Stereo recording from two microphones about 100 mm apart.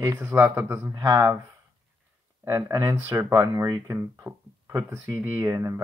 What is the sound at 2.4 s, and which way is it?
Speech, 30° right (ahead or behind).